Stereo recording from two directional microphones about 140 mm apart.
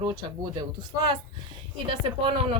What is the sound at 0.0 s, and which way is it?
Speech, 35° right (ahead or behind).